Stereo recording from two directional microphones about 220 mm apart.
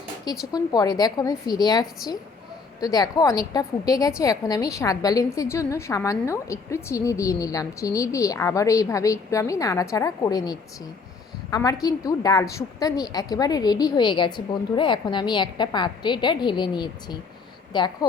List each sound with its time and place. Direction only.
0.5 s a woman's voice: 20° left (ahead or behind)